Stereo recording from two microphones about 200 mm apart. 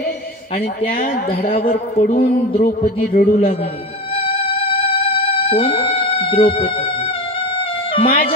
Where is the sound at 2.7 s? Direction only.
30° left (ahead or behind).